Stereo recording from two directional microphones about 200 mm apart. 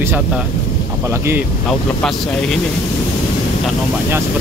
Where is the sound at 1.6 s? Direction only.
5° left (ahead or behind).